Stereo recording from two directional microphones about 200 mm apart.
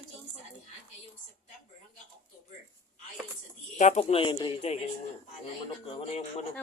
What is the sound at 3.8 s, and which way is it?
Speech, 35° left (ahead or behind).